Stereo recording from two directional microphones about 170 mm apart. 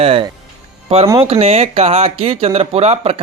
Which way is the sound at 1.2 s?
35° right (ahead or behind).